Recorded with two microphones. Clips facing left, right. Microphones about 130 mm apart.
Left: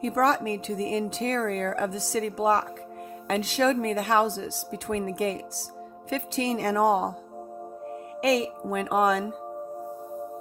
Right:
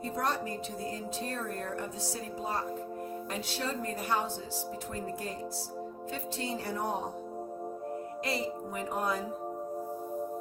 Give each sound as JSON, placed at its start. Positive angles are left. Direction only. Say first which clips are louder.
{"t": 0.0, "sound": "speech", "louder": "left 9 dB", "side_deg": 90}
{"t": 8.2, "sound": "music", "louder": "left 11 dB", "side_deg": 85}